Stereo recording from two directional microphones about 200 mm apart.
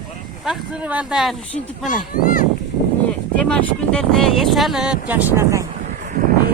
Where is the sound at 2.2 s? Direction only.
45° left (ahead or behind).